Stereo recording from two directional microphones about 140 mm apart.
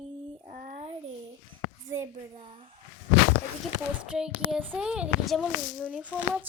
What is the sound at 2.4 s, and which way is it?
Speech, 45° right (ahead or behind).